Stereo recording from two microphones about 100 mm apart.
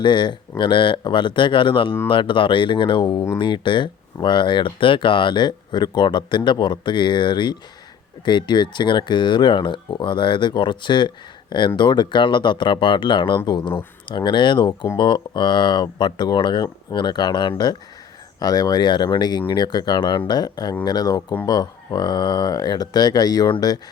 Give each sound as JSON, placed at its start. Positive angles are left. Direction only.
{"t": 0.0, "sound": "speech", "side_deg": 50}